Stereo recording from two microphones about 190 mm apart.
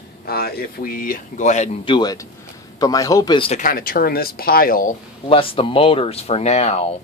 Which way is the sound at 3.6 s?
50° left (ahead or behind).